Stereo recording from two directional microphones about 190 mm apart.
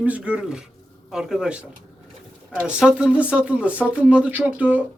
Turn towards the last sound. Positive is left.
turn(degrees=-10)  # may be behind; listen again after turning